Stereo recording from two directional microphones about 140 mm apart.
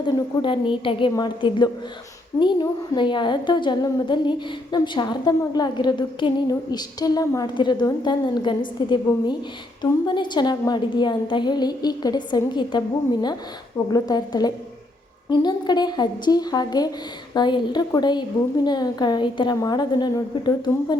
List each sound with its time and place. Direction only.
0.0 s a woman's voice: 35° left (ahead or behind)
13.9 s a woman's voice: 30° left (ahead or behind)